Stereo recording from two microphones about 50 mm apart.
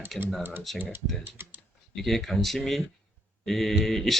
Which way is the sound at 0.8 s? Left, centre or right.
Right.